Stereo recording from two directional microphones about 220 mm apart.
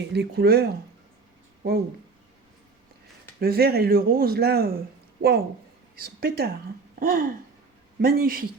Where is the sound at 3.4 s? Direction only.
45° right (ahead or behind).